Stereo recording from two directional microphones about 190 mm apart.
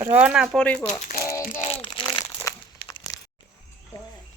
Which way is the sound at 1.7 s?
25° left (ahead or behind).